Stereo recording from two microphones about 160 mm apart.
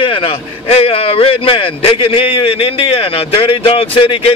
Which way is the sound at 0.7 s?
35° left (ahead or behind).